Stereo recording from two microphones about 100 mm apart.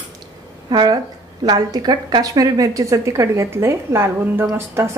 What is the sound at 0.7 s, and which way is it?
A woman's voice, 45° right (ahead or behind).